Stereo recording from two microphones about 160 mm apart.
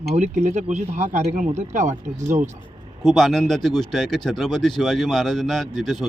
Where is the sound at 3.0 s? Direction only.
Centre (ahead or behind).